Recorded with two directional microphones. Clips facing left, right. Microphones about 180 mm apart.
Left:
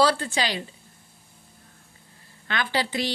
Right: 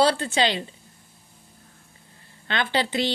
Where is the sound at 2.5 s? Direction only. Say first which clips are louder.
Right 2 dB; 25° right (ahead or behind).